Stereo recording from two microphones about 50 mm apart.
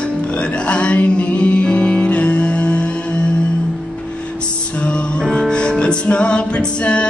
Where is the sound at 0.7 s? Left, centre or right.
Left.